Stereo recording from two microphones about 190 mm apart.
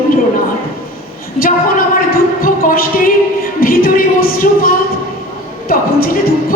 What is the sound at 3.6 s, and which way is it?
A woman's voice, 50° left (ahead or behind).